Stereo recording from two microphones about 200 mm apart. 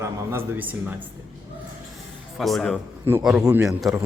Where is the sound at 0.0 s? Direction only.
15° right (ahead or behind).